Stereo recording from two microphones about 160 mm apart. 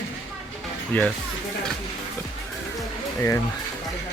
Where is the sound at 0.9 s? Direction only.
10° left (ahead or behind).